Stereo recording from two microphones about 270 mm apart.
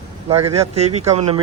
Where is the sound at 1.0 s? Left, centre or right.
Right.